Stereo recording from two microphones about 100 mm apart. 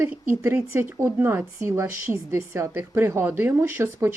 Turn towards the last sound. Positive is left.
turn(degrees=-25)  # may be behind; listen again after turning